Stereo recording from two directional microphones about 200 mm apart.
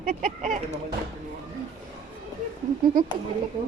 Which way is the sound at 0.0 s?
40° right (ahead or behind).